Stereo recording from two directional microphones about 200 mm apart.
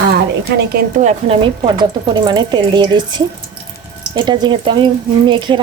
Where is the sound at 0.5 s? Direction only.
50° right (ahead or behind).